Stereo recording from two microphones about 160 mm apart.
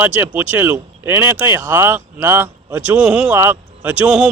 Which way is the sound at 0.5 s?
15° right (ahead or behind).